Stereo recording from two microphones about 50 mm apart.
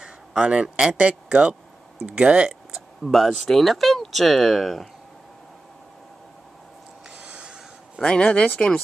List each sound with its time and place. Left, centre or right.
0.0 s a man's voice: centre
2.7 s speech: centre
7.2 s a sound: right
8.0 s speech: left